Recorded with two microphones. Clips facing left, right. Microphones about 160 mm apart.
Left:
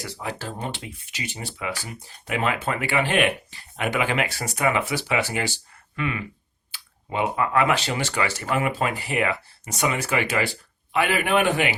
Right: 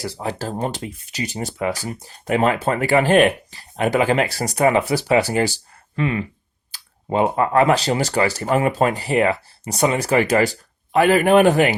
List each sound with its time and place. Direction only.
0.0 s speech: 35° right (ahead or behind)